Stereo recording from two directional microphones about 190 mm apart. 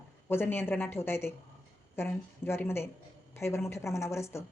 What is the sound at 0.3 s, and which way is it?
A woman's voice, 10° left (ahead or behind).